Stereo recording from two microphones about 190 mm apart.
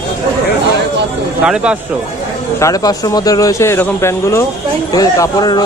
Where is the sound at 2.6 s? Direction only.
20° left (ahead or behind).